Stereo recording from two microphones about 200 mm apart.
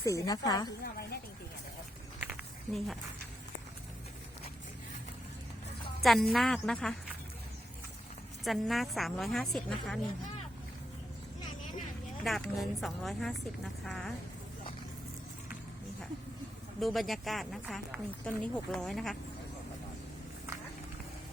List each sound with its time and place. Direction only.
0.0 s a woman's voice: 15° left (ahead or behind)
0.8 s a woman's voice: 50° left (ahead or behind)
2.7 s speech: centre (ahead or behind)
6.0 s speech: centre (ahead or behind)
8.4 s speech: centre (ahead or behind)
12.2 s speech: centre (ahead or behind)
16.8 s speech: centre (ahead or behind)